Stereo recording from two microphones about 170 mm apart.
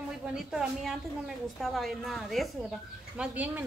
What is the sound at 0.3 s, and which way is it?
A woman's voice, 5° right (ahead or behind).